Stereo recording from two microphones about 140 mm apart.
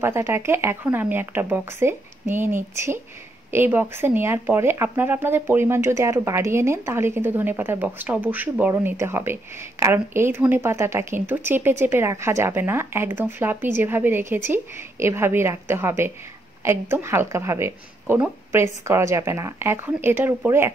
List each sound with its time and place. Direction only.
0.0 s speech: 15° right (ahead or behind)